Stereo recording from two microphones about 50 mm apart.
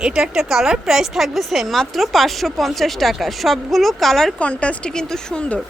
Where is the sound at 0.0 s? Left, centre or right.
Centre.